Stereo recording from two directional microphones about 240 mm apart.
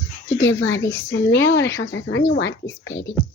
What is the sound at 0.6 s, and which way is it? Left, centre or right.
Speech, left.